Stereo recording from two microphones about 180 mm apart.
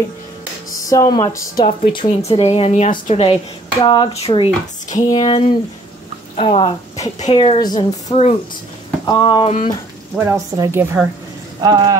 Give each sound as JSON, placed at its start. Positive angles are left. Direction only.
{"t": 0.8, "sound": "speech", "side_deg": 20}
{"t": 3.8, "sound": "speech", "side_deg": 25}
{"t": 8.1, "sound": "speech", "side_deg": 35}
{"t": 9.0, "sound": "speech", "side_deg": 25}
{"t": 10.1, "sound": "a woman's voice", "side_deg": -15}